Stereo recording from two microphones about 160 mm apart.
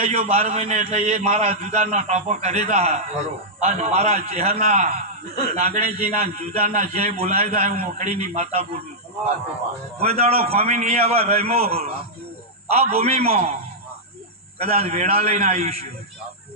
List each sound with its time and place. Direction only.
0.0 s a man's voice: 40° right (ahead or behind)
10.0 s a man's voice: 40° right (ahead or behind)
14.6 s a man's voice: 40° right (ahead or behind)